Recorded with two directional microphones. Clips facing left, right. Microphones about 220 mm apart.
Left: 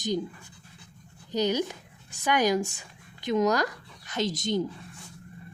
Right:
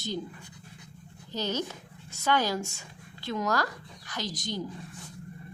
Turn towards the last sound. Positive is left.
turn(degrees=25)  # may be behind; listen again after turning